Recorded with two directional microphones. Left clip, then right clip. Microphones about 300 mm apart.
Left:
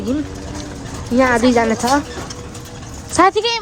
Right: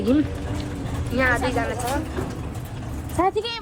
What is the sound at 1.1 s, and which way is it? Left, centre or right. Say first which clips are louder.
Speech: left 8 dB; left.